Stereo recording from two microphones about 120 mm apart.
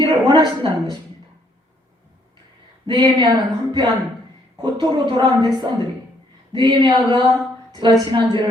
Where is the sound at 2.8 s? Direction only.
35° right (ahead or behind).